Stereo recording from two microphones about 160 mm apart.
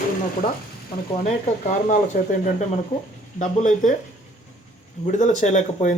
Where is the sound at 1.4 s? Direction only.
50° left (ahead or behind).